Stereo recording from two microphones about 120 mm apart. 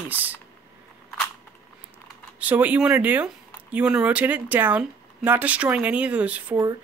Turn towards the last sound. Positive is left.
turn(degrees=-10)  # may be behind; listen again after turning